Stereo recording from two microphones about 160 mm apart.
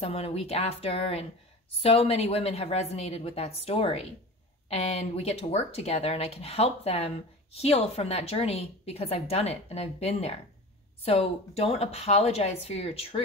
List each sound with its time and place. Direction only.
0.0 s a woman's voice: 40° left (ahead or behind)